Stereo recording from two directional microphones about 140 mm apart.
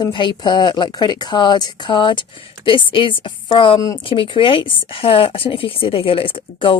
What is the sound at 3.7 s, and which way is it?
Speech, 25° left (ahead or behind).